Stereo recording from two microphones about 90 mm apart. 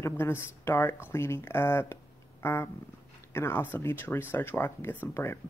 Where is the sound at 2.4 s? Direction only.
30° left (ahead or behind).